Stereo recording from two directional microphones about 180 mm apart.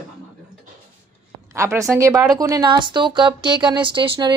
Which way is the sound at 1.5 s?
15° right (ahead or behind).